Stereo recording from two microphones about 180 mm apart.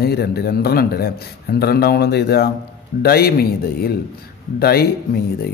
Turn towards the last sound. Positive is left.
turn(degrees=60)  # may be behind; listen again after turning